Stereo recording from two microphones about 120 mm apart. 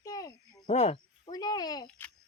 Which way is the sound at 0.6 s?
70° left (ahead or behind).